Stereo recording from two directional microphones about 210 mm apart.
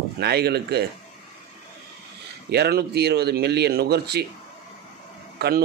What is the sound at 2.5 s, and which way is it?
A man's voice, 50° right (ahead or behind).